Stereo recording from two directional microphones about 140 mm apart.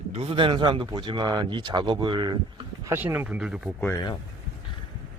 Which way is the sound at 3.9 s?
30° left (ahead or behind).